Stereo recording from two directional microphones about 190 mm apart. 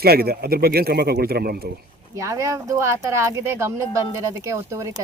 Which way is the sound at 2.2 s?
15° right (ahead or behind).